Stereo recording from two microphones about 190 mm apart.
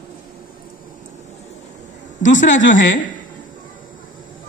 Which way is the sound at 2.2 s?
40° left (ahead or behind).